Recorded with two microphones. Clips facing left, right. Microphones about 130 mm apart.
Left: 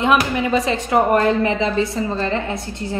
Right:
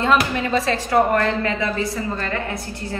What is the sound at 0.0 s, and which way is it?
A woman's voice, 15° left (ahead or behind).